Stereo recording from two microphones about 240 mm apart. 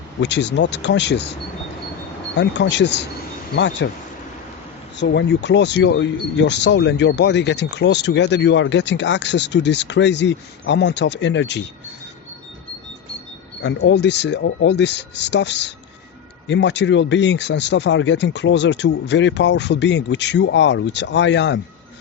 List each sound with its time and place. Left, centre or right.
0.2 s speech: left
2.3 s speech: left
4.9 s speech: left
13.6 s speech: left